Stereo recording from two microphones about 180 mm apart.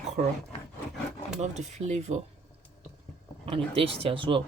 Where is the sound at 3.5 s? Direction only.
30° right (ahead or behind).